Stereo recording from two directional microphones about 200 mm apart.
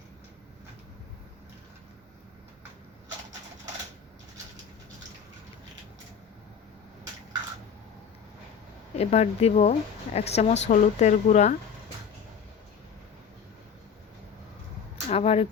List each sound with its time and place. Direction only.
9.0 s a woman's voice: 30° left (ahead or behind)
15.1 s speech: 30° left (ahead or behind)